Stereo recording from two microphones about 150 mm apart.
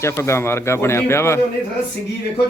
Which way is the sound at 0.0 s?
15° left (ahead or behind).